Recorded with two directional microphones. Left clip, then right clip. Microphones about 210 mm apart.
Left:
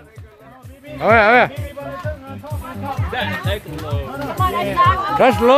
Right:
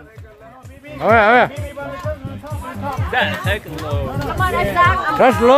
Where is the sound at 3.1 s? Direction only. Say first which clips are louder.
Right 5 dB; 15° right (ahead or behind).